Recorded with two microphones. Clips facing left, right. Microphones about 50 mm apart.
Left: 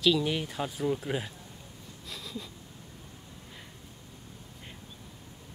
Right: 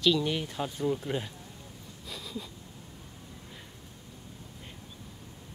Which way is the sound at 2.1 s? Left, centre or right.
Centre.